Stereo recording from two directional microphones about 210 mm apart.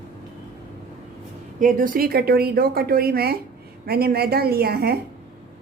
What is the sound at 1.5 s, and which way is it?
Speech, 40° right (ahead or behind).